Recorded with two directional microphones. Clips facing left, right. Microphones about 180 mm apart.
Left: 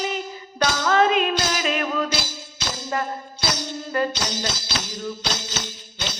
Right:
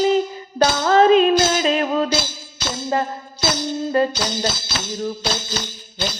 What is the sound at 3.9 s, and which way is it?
Music, 30° right (ahead or behind).